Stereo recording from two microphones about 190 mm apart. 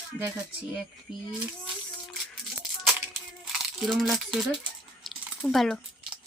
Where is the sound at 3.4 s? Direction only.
Centre (ahead or behind).